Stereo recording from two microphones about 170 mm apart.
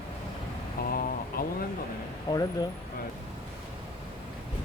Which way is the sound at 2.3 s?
25° left (ahead or behind).